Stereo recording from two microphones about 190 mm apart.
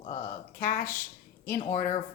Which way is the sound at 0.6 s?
45° left (ahead or behind).